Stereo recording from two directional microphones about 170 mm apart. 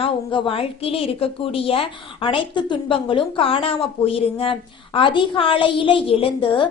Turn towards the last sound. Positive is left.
turn(degrees=30)  # may be behind; listen again after turning